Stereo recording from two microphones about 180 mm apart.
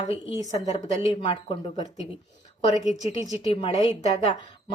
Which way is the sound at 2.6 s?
40° left (ahead or behind).